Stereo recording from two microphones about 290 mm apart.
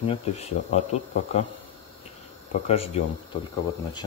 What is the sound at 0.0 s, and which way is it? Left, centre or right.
Speech, left.